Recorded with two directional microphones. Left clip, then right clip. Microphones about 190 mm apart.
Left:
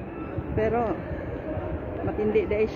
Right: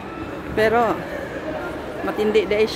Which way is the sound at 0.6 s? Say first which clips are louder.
Right 8 dB; 15° right (ahead or behind).